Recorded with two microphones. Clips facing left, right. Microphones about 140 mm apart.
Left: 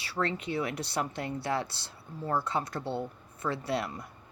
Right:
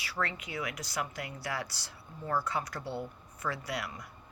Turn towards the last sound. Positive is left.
turn(degrees=30)  # may be behind; listen again after turning